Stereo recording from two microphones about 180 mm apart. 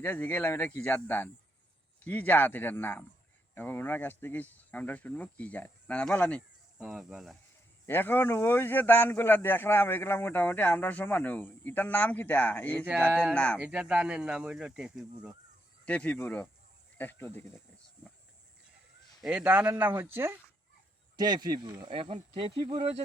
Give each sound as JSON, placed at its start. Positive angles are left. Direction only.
{"t": 0.0, "sound": "speech", "side_deg": 10}
{"t": 7.9, "sound": "speech", "side_deg": 10}
{"t": 13.6, "sound": "speech", "side_deg": -5}
{"t": 15.9, "sound": "speech", "side_deg": 10}
{"t": 19.2, "sound": "speech", "side_deg": -5}
{"t": 21.2, "sound": "speech", "side_deg": -25}